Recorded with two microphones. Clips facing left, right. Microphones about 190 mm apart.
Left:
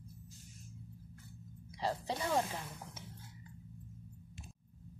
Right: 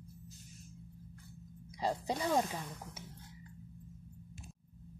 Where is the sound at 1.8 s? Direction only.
15° right (ahead or behind).